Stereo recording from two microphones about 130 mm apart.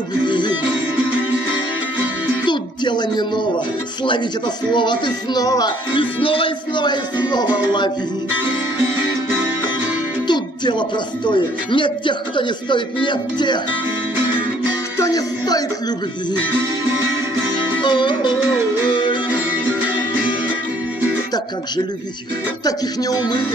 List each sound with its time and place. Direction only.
0.2 s music: 35° left (ahead or behind)
2.4 s music: 35° left (ahead or behind)
4.7 s speech: 35° left (ahead or behind)
10.2 s speech: 35° left (ahead or behind)
15.0 s music: 30° left (ahead or behind)
17.8 s speech: 35° left (ahead or behind)
18.9 s music: 40° left (ahead or behind)
22.7 s speech: 30° left (ahead or behind)